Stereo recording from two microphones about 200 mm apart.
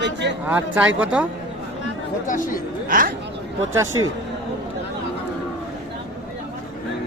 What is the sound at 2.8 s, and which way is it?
Speech, 45° right (ahead or behind).